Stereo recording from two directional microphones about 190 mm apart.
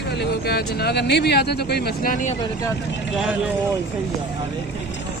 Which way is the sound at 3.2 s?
5° right (ahead or behind).